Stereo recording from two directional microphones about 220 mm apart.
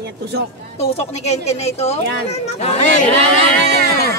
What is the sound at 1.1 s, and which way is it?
A woman's voice, 30° left (ahead or behind).